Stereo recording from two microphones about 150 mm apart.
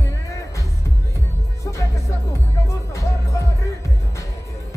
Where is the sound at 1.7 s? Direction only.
20° left (ahead or behind).